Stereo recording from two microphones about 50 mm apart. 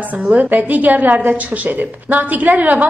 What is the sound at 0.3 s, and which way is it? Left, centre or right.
A woman's voice, right.